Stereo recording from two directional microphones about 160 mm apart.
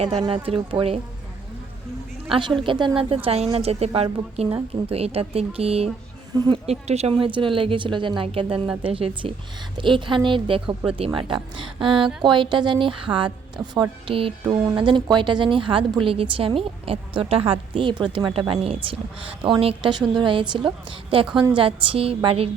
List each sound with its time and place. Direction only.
0.0 s speech: 30° right (ahead or behind)
2.3 s speech: 30° right (ahead or behind)
6.3 s speech: 25° right (ahead or behind)
6.7 s speech: 40° right (ahead or behind)